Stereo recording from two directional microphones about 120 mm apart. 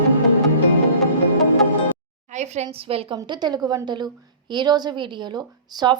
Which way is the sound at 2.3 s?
70° right (ahead or behind).